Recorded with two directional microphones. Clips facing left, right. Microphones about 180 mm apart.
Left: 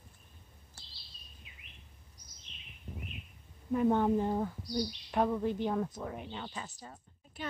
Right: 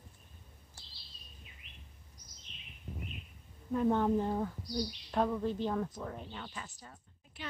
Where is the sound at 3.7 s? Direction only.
10° left (ahead or behind).